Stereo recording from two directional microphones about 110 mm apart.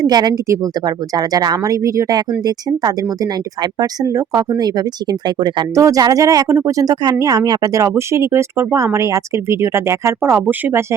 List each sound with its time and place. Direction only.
0.0 s speech: 35° right (ahead or behind)
3.8 s speech: 30° right (ahead or behind)
5.7 s speech: 30° right (ahead or behind)